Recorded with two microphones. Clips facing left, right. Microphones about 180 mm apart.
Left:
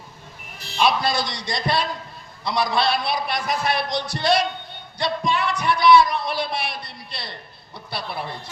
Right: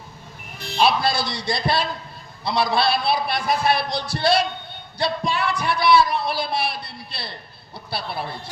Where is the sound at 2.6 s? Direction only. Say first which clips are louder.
Right 2 dB; 30° right (ahead or behind).